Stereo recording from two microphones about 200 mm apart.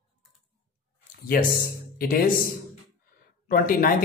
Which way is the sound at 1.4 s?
50° left (ahead or behind).